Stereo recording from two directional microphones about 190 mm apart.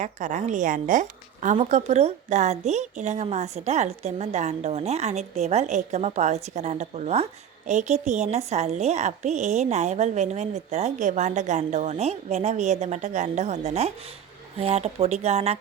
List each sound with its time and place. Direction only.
0.0 s a woman's voice: 40° right (ahead or behind)